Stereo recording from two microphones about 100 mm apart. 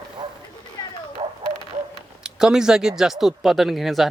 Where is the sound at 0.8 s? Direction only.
35° left (ahead or behind).